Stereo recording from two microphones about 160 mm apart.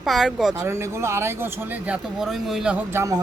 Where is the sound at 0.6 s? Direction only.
15° right (ahead or behind).